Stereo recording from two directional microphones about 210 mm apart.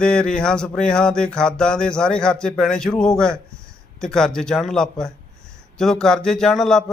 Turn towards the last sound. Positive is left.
turn(degrees=0)  # may be behind; listen again after turning